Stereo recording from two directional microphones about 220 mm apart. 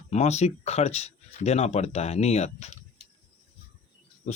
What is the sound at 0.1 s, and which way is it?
Speech, 30° left (ahead or behind).